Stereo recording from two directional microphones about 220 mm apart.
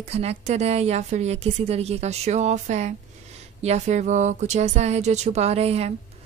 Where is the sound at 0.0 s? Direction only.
30° right (ahead or behind).